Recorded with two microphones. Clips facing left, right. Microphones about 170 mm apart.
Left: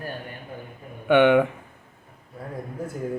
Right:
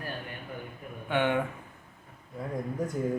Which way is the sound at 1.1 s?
75° left (ahead or behind).